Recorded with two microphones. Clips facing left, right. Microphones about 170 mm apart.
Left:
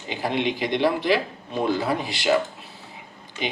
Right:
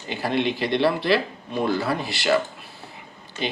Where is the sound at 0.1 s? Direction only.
20° left (ahead or behind).